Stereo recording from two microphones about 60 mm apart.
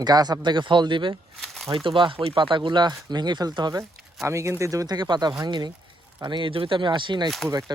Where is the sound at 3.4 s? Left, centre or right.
Right.